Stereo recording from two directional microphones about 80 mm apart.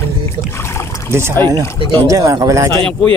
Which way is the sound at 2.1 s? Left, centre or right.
Right.